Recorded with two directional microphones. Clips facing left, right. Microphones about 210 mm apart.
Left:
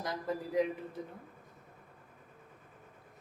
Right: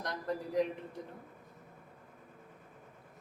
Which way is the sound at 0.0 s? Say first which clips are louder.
Left 1 dB; 5° left (ahead or behind).